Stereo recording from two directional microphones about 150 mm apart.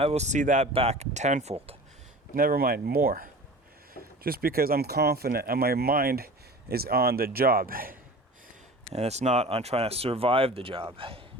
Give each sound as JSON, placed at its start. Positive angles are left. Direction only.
{"t": 0.0, "sound": "speech", "side_deg": -45}
{"t": 2.3, "sound": "speech", "side_deg": -75}
{"t": 8.9, "sound": "speech", "side_deg": -45}